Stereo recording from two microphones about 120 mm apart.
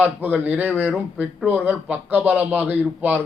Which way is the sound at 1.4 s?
15° right (ahead or behind).